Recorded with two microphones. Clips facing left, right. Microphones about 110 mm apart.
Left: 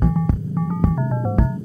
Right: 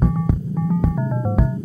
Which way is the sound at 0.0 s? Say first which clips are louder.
Even; 5° right (ahead or behind).